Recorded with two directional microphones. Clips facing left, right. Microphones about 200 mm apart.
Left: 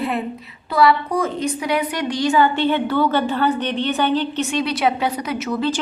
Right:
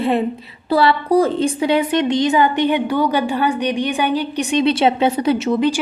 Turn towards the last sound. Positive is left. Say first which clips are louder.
# right 7 dB
turn(degrees=-25)  # may be behind; listen again after turning